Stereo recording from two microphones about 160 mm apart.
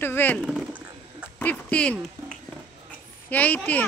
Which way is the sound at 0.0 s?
10° left (ahead or behind).